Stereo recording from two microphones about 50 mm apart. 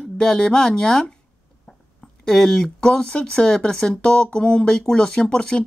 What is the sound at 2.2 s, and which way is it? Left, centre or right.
Speech, centre.